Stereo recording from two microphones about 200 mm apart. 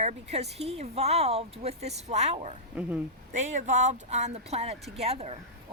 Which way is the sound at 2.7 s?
5° right (ahead or behind).